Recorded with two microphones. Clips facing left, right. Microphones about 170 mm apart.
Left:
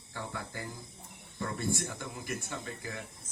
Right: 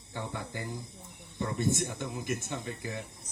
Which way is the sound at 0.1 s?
20° right (ahead or behind).